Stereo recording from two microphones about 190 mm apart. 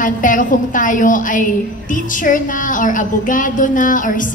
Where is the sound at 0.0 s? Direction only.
45° left (ahead or behind).